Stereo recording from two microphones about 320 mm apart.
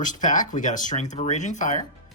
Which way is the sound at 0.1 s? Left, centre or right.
Left.